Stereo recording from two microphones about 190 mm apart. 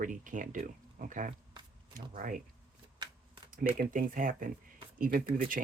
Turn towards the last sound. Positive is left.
turn(degrees=-50)  # may be behind; listen again after turning